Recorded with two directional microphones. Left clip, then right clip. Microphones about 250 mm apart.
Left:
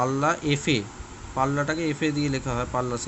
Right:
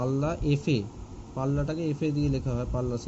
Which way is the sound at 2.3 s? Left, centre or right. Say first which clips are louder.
Left 4 dB; left.